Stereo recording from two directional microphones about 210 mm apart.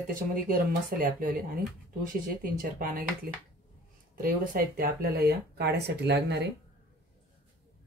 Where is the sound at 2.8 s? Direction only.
40° right (ahead or behind).